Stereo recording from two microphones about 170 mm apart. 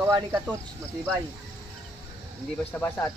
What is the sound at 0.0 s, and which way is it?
Speech, 10° right (ahead or behind).